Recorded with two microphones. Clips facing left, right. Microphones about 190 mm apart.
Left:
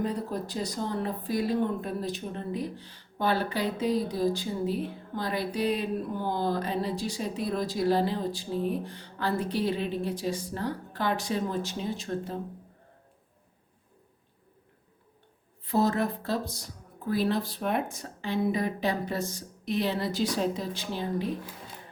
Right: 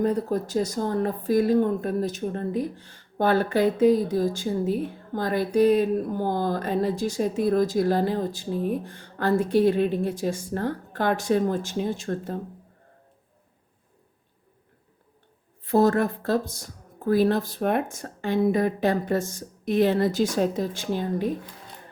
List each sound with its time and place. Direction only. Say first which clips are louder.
0.0 s speech: right 7 dB; 45° right (ahead or behind)
15.6 s speech: right 6 dB; 50° right (ahead or behind)